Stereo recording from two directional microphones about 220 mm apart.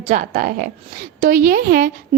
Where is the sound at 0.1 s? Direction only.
40° right (ahead or behind).